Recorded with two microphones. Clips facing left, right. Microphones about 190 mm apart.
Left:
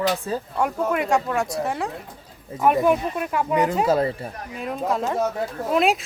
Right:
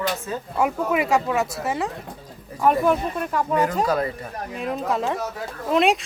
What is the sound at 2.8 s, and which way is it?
Speech, 10° left (ahead or behind).